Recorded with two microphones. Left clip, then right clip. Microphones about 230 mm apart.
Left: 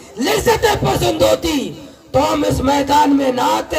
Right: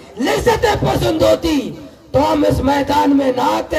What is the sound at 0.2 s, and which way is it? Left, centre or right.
Speech, left.